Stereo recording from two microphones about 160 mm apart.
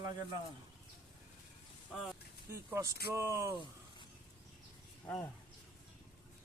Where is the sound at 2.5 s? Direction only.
20° right (ahead or behind).